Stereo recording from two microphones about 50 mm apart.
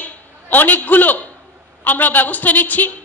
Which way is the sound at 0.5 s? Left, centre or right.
Left.